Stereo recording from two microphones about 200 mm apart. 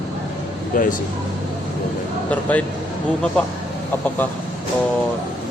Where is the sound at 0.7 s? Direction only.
45° left (ahead or behind).